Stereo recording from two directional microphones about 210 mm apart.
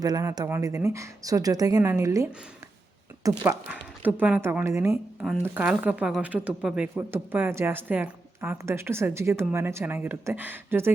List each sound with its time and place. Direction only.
0.0 s speech: 15° right (ahead or behind)